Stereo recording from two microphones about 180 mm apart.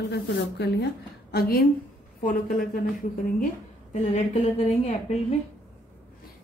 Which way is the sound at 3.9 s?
40° left (ahead or behind).